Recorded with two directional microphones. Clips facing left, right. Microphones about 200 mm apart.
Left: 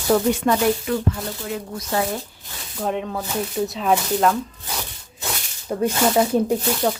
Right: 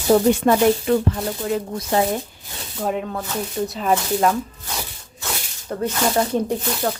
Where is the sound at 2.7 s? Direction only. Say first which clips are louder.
Even; centre (ahead or behind).